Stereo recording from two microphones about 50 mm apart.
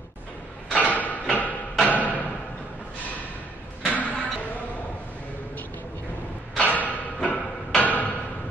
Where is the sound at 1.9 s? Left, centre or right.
Left.